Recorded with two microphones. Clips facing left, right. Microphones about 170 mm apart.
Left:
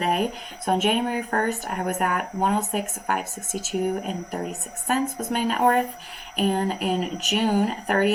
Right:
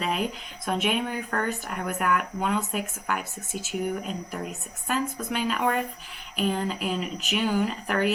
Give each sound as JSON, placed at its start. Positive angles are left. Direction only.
{"t": 0.0, "sound": "speech", "side_deg": 45}